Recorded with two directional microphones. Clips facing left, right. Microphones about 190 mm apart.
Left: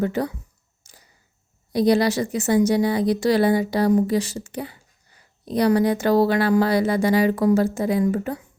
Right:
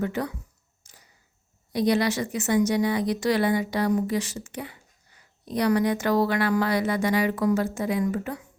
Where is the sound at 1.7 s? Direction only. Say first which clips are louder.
Left 5 dB; 35° left (ahead or behind).